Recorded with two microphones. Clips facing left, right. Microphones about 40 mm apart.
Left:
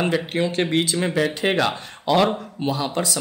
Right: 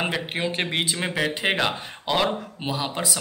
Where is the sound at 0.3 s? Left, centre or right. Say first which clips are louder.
Left 5 dB; centre.